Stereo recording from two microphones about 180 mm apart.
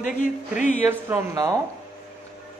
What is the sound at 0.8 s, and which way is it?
Speech, 10° right (ahead or behind).